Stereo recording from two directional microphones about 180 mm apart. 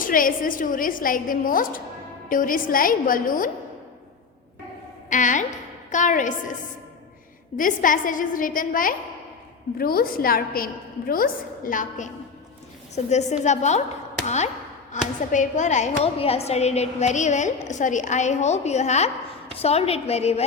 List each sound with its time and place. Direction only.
0.0 s a woman's voice: 50° left (ahead or behind)
5.0 s a woman's voice: 45° left (ahead or behind)
7.6 s a woman's voice: 50° left (ahead or behind)